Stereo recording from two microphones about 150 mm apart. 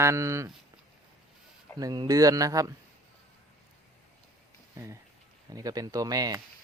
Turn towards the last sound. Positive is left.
turn(degrees=-25)  # may be behind; listen again after turning